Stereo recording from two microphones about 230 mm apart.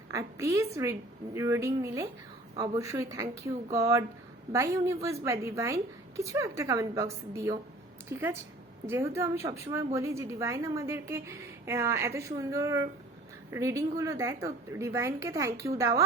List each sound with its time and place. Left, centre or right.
0.1 s a woman's voice: centre